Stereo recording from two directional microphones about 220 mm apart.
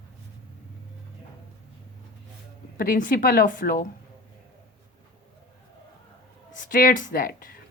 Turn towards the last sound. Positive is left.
turn(degrees=40)  # may be behind; listen again after turning